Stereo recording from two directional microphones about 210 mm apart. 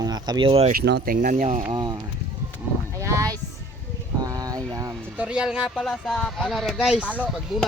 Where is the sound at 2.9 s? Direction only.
15° right (ahead or behind).